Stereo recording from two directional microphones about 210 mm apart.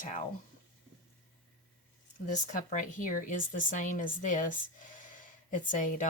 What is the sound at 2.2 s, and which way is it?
Speech, 35° left (ahead or behind).